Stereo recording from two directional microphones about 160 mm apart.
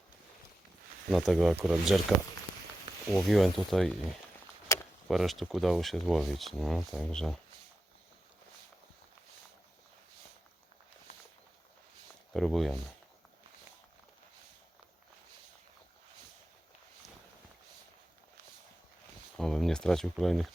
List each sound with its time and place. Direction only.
1.1 s speech: centre (ahead or behind)
4.7 s a sound: 20° left (ahead or behind)
5.0 s speech: centre (ahead or behind)
12.3 s speech: centre (ahead or behind)
19.4 s speech: 5° left (ahead or behind)